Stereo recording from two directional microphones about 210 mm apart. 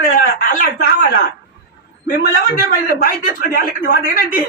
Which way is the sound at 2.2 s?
45° left (ahead or behind).